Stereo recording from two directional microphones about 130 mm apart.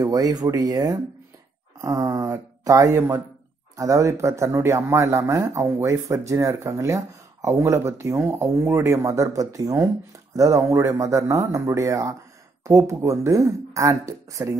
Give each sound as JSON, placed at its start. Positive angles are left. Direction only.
{"t": 0.0, "sound": "speech", "side_deg": -30}